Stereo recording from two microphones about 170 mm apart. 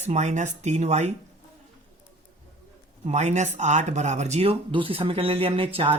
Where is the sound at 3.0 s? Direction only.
40° right (ahead or behind).